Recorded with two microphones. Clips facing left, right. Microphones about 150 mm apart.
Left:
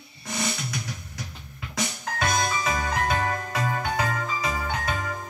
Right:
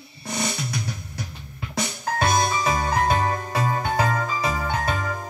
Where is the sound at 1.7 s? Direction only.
30° right (ahead or behind).